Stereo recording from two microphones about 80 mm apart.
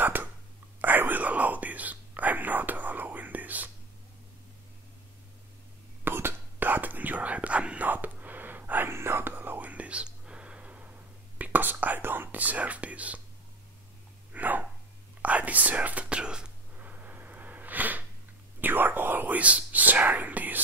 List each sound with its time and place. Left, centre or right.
0.0 s whispering: right
6.0 s whispering: right
14.3 s dog: right
15.2 s whispering: centre